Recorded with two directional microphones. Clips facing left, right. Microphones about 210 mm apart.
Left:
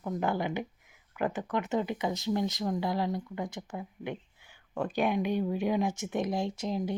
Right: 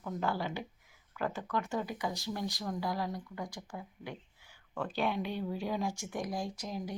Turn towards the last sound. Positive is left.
turn(degrees=25)  # may be behind; listen again after turning